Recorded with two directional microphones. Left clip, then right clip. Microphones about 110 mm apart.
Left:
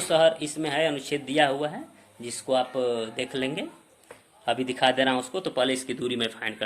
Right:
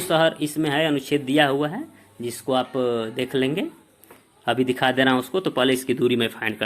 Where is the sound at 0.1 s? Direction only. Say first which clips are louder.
Right 1 dB; 40° right (ahead or behind).